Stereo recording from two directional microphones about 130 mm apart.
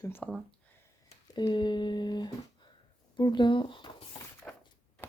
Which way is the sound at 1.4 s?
35° left (ahead or behind).